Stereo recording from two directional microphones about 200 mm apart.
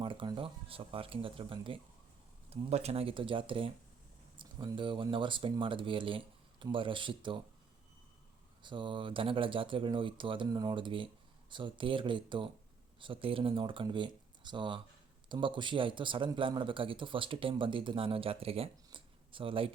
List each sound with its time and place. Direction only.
0.0 s a man's voice: 25° right (ahead or behind)
8.6 s a man's voice: 25° right (ahead or behind)